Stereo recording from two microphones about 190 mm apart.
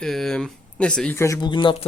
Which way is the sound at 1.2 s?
15° left (ahead or behind).